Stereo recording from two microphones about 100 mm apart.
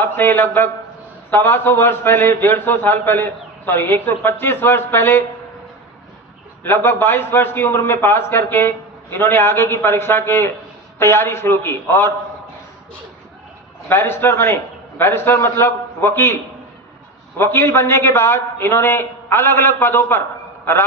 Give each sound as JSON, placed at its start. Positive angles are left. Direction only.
{"t": 0.0, "sound": "a man's voice", "side_deg": 20}
{"t": 6.6, "sound": "a man's voice", "side_deg": 25}
{"t": 13.8, "sound": "a man's voice", "side_deg": 20}
{"t": 17.4, "sound": "a man's voice", "side_deg": 25}